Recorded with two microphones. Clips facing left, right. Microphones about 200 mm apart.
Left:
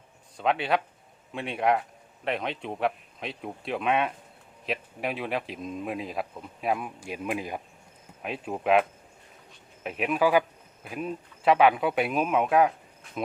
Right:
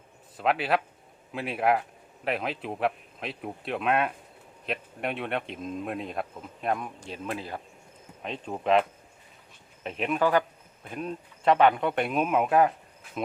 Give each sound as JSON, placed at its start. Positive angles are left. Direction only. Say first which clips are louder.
{"t": 0.3, "sound": "speech", "louder": "even", "side_deg": -5}